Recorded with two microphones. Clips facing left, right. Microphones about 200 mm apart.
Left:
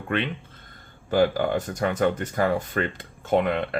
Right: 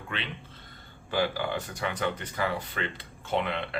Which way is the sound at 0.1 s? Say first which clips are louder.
Left 12 dB; 55° left (ahead or behind).